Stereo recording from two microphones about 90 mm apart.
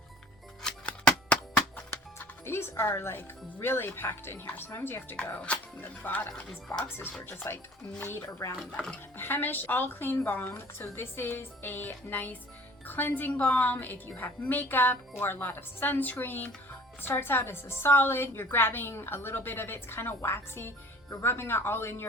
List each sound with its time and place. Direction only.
0.6 s shuffling cards: 10° left (ahead or behind)
2.1 s a woman's voice: 25° left (ahead or behind)